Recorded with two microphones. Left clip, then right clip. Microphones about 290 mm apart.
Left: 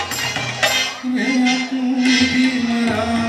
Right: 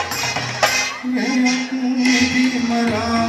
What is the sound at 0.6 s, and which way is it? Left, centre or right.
Music, centre.